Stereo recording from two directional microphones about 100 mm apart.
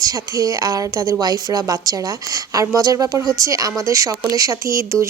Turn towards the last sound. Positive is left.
turn(degrees=-30)  # may be behind; listen again after turning